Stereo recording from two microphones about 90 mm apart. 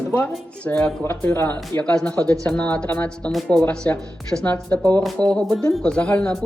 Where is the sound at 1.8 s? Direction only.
10° left (ahead or behind).